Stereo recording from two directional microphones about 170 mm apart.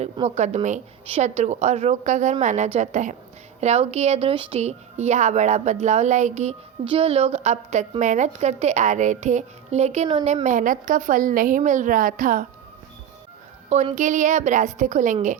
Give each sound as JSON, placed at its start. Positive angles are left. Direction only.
{"t": 0.0, "sound": "a woman's voice", "side_deg": -40}
{"t": 13.9, "sound": "a woman's voice", "side_deg": -45}